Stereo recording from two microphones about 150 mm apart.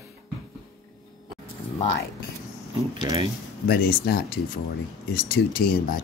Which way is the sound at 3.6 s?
90° left.